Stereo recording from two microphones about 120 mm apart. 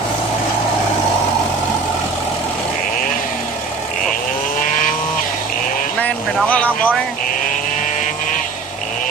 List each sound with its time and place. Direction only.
4.7 s chainsaw: 90° left
6.5 s speech: 10° left (ahead or behind)